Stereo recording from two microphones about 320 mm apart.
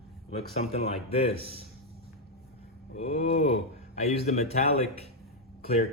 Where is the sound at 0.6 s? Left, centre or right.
Centre.